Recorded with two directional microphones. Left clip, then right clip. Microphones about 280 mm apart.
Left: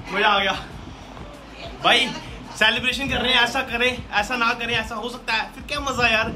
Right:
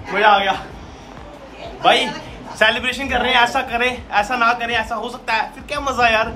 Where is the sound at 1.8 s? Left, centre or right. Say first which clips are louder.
Right 3 dB; centre.